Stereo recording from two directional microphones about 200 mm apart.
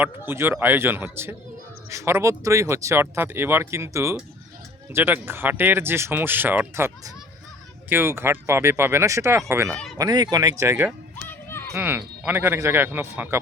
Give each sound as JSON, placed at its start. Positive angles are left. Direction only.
{"t": 0.0, "sound": "speech", "side_deg": -10}
{"t": 9.7, "sound": "speech", "side_deg": 0}
{"t": 10.0, "sound": "speech", "side_deg": -20}
{"t": 11.3, "sound": "a sound", "side_deg": 10}
{"t": 11.7, "sound": "speech", "side_deg": -10}